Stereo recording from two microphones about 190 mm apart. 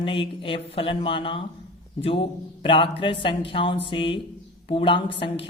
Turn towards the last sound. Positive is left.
turn(degrees=25)  # may be behind; listen again after turning